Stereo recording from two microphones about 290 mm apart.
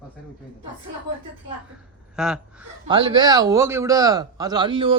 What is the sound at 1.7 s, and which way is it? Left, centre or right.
Speech, centre.